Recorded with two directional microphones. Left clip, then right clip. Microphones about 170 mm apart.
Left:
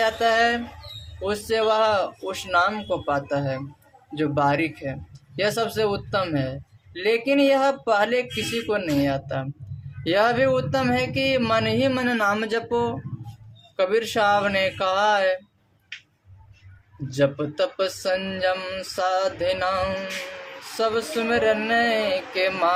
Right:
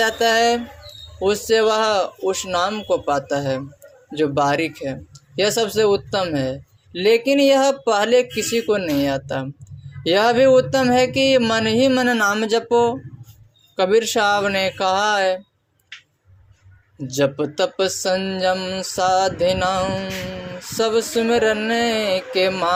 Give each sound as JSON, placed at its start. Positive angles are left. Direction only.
{"t": 0.0, "sound": "speech", "side_deg": -20}
{"t": 17.1, "sound": "speech", "side_deg": -30}